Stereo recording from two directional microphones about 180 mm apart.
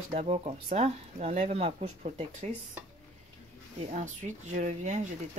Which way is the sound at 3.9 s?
45° right (ahead or behind).